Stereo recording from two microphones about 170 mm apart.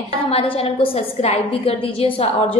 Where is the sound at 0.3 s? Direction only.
35° left (ahead or behind).